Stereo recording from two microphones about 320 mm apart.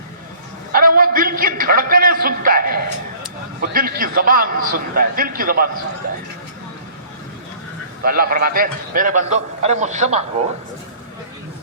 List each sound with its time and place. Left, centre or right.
0.7 s a sound: right
3.6 s a man's voice: right
8.0 s a man's voice: right